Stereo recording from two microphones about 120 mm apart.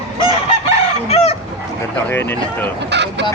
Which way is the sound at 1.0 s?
55° left (ahead or behind).